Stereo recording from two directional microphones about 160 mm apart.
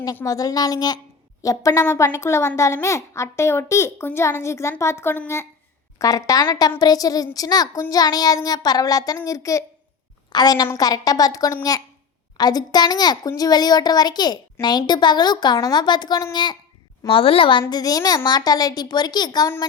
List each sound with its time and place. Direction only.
0.2 s a child's voice: 20° left (ahead or behind)
17.6 s a child's voice: 25° left (ahead or behind)